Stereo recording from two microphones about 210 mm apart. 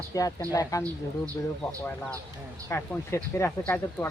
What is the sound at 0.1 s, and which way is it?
Speech, 15° left (ahead or behind).